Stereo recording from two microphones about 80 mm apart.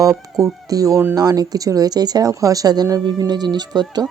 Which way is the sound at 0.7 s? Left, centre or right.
Right.